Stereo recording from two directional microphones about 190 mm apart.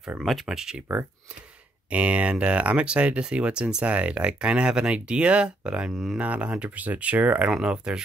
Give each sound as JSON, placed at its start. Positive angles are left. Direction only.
{"t": 0.0, "sound": "speech", "side_deg": 0}